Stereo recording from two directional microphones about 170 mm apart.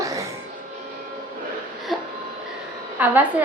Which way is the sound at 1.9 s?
Centre (ahead or behind).